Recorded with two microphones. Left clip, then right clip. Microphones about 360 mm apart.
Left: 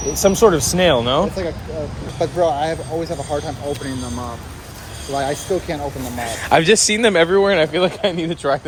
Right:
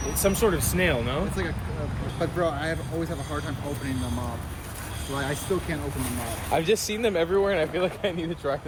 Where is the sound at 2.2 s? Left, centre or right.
Centre.